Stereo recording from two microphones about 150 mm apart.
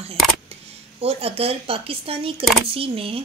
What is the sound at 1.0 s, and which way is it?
A woman's voice, 40° right (ahead or behind).